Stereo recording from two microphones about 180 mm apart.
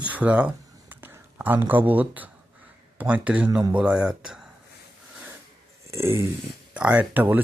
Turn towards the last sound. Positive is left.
turn(degrees=-10)  # may be behind; listen again after turning